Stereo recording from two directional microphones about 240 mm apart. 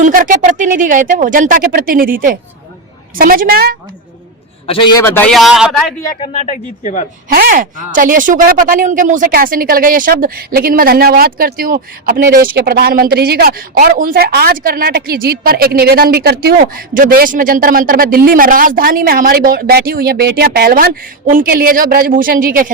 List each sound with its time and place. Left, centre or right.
0.0 s speech: right
4.6 s a man's voice: left; by 5.9 s centre
6.2 s speech: left
7.3 s speech: right